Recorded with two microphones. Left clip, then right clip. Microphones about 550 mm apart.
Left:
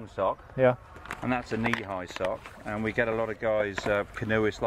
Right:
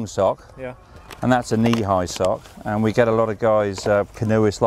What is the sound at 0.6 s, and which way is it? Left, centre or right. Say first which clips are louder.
Speech: left 10 dB; left.